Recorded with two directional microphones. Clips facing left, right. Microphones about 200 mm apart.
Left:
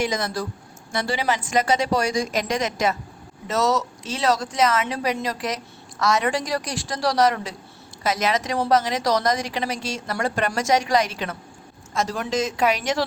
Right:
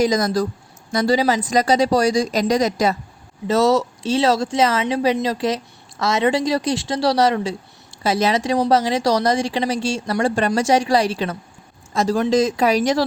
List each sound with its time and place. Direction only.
0.0 s a woman's voice: 35° right (ahead or behind)